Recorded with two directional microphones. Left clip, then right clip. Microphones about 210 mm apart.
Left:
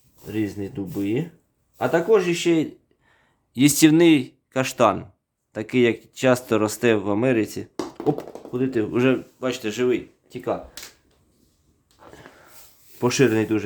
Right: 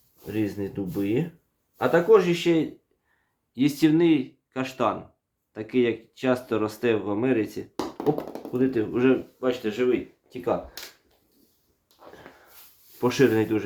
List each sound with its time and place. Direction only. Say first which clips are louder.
0.3 s speech: left 1 dB; 35° left (ahead or behind)
3.1 s speech: left 13 dB; 60° left (ahead or behind)
8.2 s speech: even; 35° left (ahead or behind)
8.9 s speech: left 2 dB; 60° left (ahead or behind)
13.0 s speech: left 2 dB; 45° left (ahead or behind)